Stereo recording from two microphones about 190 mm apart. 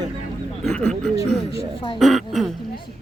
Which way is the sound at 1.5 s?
25° left (ahead or behind).